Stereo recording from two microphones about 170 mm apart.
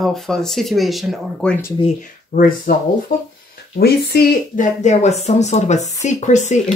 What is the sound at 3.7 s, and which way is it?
Speech, 65° left (ahead or behind).